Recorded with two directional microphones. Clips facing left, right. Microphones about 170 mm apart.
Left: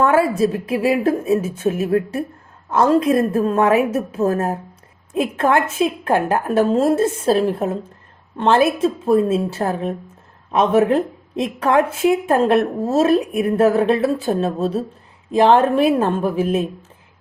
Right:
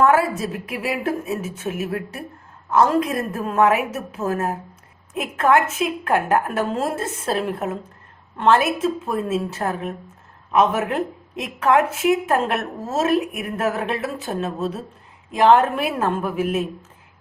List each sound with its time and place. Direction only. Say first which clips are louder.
0.0 s a woman's voice: left 2 dB; 30° left (ahead or behind)